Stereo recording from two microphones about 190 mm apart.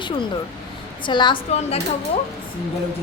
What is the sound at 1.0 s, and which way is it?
Speech, 25° left (ahead or behind).